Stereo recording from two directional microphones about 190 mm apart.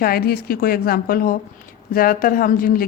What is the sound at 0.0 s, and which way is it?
A woman's voice, 50° left (ahead or behind).